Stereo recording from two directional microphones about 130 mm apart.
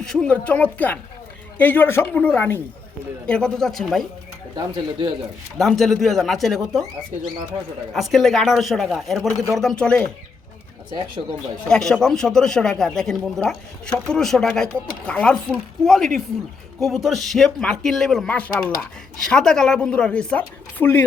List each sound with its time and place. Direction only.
0.0 s speech: 5° left (ahead or behind)
4.5 s speech: 40° right (ahead or behind)
5.5 s speech: centre (ahead or behind)
7.9 s speech: centre (ahead or behind)
11.7 s speech: 5° left (ahead or behind)